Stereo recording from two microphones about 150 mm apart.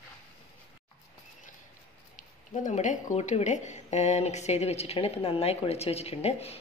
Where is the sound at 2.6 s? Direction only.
55° left (ahead or behind).